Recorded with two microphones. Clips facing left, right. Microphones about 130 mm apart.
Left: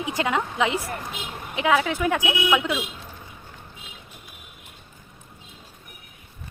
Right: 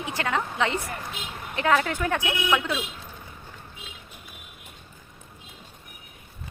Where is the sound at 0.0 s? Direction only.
15° left (ahead or behind).